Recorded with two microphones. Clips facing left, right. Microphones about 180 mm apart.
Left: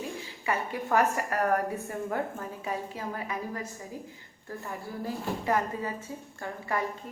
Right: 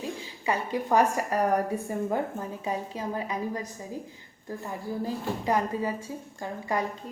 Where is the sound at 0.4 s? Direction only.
15° right (ahead or behind).